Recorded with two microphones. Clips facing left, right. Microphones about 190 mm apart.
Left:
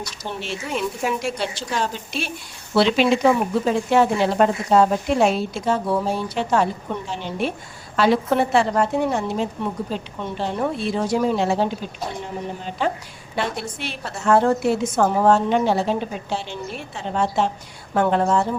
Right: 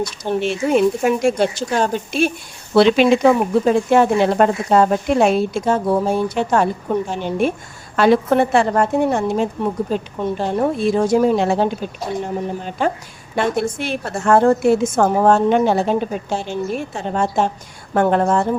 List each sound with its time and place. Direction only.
0.0 s a woman's voice: 55° right (ahead or behind)